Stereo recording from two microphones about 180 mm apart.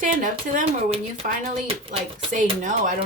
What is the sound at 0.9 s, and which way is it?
Speech, 30° right (ahead or behind).